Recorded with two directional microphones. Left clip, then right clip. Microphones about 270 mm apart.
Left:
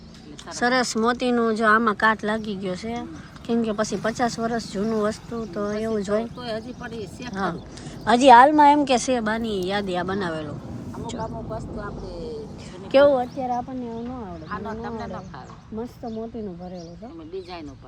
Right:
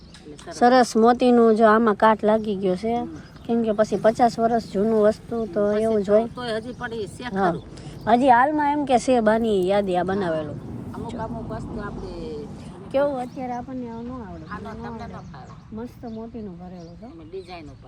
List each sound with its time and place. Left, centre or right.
0.5 s speech: centre
8.0 s speech: centre
11.4 s vehicle: right
12.9 s a woman's voice: left
13.3 s speech: centre
14.5 s speech: left